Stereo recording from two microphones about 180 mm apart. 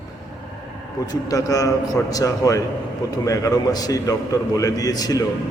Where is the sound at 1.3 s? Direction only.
20° left (ahead or behind).